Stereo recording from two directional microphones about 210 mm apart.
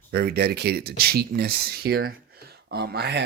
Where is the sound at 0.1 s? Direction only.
45° right (ahead or behind).